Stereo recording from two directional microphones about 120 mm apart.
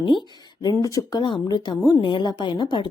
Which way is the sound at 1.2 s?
40° left (ahead or behind).